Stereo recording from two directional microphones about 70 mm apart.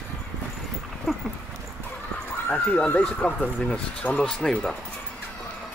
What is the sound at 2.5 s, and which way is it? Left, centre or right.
Speech, left.